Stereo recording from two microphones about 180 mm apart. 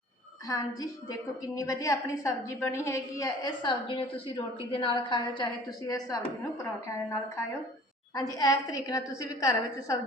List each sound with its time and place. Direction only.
1.5 s a woman's voice: 20° left (ahead or behind)
8.1 s a woman's voice: 20° left (ahead or behind)